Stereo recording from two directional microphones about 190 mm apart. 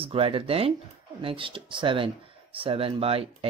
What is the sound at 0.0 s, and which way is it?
Speech, 30° right (ahead or behind).